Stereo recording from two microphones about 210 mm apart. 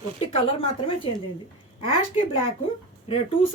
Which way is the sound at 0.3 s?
25° left (ahead or behind).